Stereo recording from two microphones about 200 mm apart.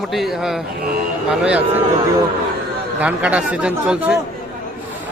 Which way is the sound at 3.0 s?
5° right (ahead or behind).